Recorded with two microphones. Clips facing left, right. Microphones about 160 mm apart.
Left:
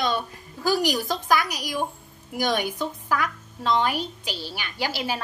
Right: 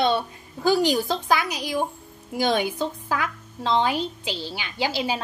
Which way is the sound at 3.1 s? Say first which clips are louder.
Left 1 dB; 20° right (ahead or behind).